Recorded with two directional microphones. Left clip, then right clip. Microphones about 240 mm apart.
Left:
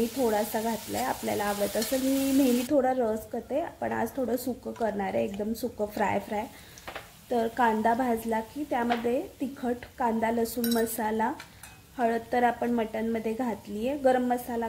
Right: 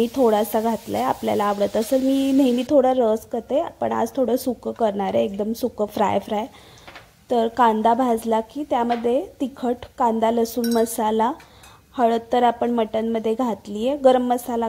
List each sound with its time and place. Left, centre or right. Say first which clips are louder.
0.2 s frying: right 10 dB; right
2.7 s a woman's voice: right 8 dB; right